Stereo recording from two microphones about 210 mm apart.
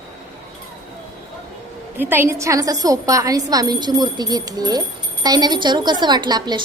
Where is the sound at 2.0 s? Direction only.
10° right (ahead or behind).